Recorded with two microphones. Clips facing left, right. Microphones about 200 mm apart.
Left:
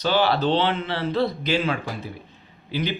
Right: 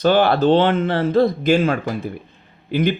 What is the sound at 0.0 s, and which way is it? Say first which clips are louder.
A man's voice: right 6 dB; 50° right (ahead or behind).